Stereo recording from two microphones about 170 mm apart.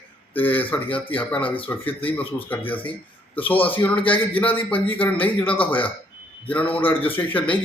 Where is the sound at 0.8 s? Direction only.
30° left (ahead or behind).